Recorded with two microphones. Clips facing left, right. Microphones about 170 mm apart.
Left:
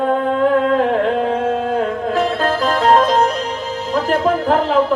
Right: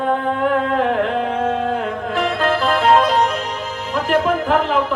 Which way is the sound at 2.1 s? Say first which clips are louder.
Even; 35° left (ahead or behind).